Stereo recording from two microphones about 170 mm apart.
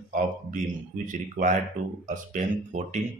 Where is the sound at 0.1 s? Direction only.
50° right (ahead or behind).